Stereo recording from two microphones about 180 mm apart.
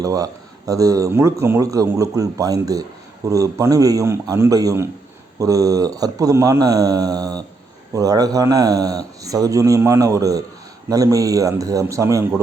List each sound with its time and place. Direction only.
0.0 s speech: 20° right (ahead or behind)